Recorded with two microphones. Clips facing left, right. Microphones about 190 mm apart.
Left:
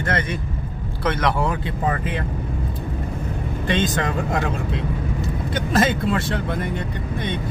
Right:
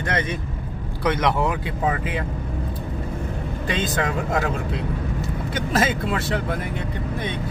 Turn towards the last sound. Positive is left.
turn(degrees=-5)  # may be behind; listen again after turning